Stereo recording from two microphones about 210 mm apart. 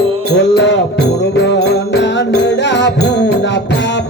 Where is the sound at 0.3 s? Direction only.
55° left (ahead or behind).